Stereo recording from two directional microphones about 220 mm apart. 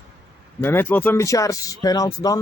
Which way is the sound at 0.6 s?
10° left (ahead or behind).